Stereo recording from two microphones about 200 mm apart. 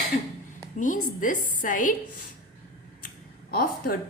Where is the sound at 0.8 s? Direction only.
40° left (ahead or behind).